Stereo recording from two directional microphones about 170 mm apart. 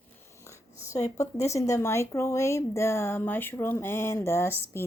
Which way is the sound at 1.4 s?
15° left (ahead or behind).